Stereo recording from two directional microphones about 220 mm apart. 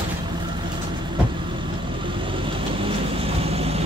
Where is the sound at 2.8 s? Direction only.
25° right (ahead or behind).